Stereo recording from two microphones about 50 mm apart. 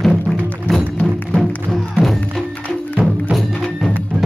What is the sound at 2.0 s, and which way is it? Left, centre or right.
Music, right.